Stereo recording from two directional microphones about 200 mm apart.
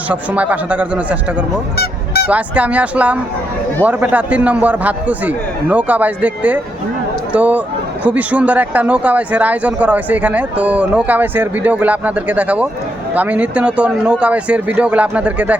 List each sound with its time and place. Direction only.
0.1 s speech: 5° right (ahead or behind)
1.7 s goose: 50° left (ahead or behind)
2.3 s speech: 5° right (ahead or behind)